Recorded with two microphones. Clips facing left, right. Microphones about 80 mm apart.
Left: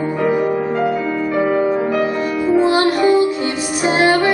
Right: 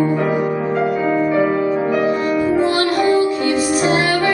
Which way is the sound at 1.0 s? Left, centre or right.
Centre.